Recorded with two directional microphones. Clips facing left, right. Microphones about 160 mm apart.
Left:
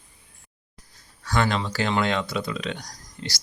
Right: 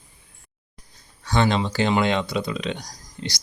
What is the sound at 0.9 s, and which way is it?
Speech, 20° right (ahead or behind).